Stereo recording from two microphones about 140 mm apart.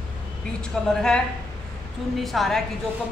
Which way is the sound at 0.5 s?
5° left (ahead or behind).